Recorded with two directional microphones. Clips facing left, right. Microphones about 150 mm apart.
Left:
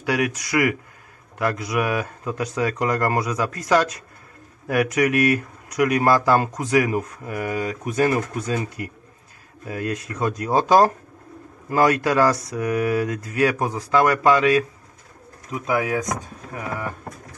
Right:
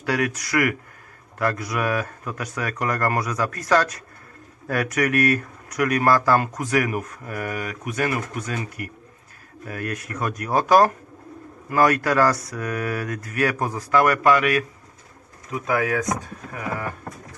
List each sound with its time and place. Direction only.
0.0 s a man's voice: 15° left (ahead or behind)
15.6 s speech: 20° left (ahead or behind)